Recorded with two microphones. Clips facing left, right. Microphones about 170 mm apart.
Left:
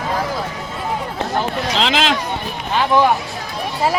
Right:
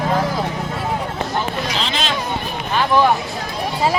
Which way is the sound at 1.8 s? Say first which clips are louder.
Left 5 dB; 90° left.